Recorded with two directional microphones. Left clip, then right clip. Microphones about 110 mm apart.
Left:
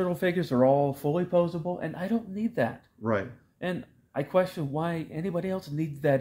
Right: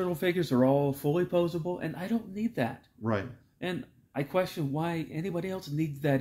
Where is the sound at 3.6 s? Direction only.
30° left (ahead or behind).